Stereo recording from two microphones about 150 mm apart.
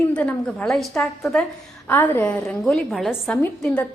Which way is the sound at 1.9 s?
15° left (ahead or behind).